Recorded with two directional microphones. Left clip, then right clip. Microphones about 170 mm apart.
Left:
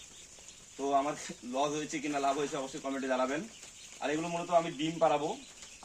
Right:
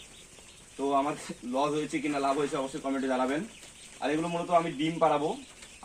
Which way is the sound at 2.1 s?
5° left (ahead or behind).